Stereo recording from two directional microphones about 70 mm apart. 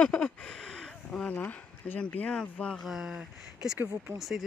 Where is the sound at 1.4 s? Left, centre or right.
Left.